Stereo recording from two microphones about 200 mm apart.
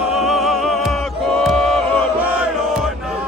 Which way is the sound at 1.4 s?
Centre (ahead or behind).